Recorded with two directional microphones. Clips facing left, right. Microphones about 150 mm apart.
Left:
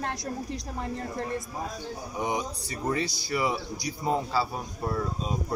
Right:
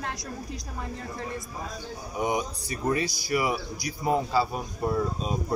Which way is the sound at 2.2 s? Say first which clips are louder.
Right 3 dB; 15° right (ahead or behind).